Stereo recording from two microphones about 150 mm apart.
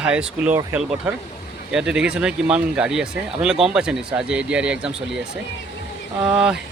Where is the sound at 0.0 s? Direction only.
10° right (ahead or behind).